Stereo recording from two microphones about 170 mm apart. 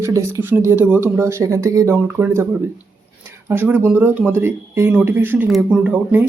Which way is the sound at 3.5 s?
10° right (ahead or behind).